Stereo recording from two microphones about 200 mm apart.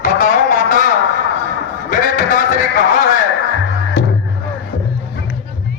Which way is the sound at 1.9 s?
40° left (ahead or behind).